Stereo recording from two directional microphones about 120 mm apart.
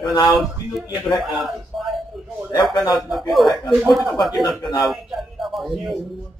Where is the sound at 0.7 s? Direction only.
Centre (ahead or behind).